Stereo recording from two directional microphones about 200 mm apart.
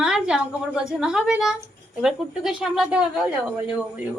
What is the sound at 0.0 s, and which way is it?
A woman's voice, 5° right (ahead or behind).